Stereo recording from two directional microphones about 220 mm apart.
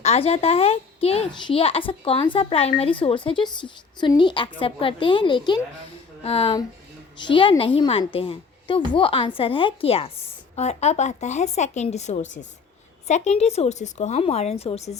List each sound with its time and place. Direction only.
0.0 s a child's voice: 30° left (ahead or behind)